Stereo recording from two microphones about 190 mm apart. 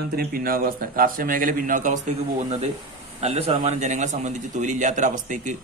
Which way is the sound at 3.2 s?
35° right (ahead or behind).